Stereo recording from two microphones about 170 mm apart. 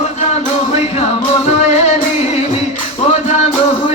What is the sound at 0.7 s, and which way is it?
Music, 40° left (ahead or behind).